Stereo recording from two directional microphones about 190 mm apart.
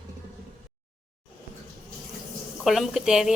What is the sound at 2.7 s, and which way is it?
Speech, centre (ahead or behind).